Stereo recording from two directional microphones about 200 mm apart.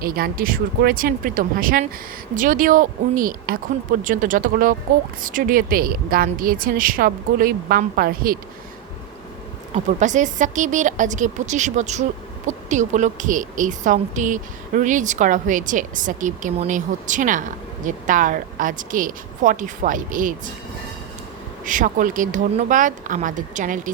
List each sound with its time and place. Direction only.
0.0 s a woman's voice: 45° right (ahead or behind)
9.7 s a woman's voice: 40° right (ahead or behind)
21.6 s a woman's voice: 40° right (ahead or behind)